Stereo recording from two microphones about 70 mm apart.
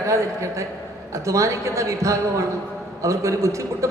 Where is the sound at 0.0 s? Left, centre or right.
Right.